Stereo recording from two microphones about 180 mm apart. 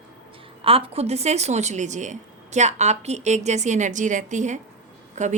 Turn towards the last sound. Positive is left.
turn(degrees=-40)  # may be behind; listen again after turning